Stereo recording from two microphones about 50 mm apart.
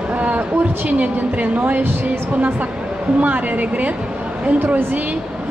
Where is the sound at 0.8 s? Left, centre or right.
Right.